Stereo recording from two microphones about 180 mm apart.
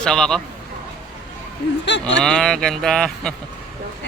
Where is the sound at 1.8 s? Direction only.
80° left.